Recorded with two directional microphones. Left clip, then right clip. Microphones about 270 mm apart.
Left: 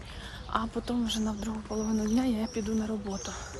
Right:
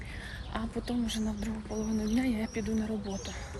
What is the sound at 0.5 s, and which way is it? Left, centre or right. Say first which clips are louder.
Speech: left 5 dB; centre.